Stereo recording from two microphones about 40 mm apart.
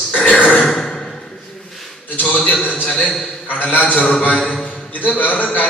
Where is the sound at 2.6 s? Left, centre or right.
Left.